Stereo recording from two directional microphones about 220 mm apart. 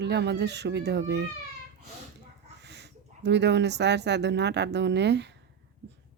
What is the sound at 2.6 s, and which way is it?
Speech, 50° right (ahead or behind).